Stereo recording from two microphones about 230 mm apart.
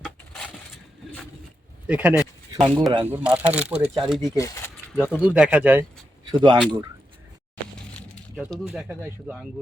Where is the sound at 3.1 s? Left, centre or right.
Centre.